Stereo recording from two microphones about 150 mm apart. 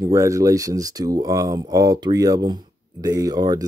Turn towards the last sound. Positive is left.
turn(degrees=-25)  # may be behind; listen again after turning